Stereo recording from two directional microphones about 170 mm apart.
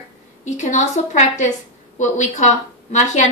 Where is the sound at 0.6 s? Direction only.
45° left (ahead or behind).